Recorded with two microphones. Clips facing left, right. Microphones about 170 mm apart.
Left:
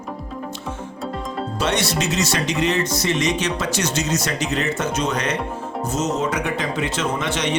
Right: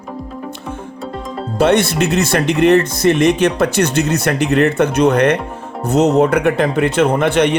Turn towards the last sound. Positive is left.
turn(degrees=-60)  # may be behind; listen again after turning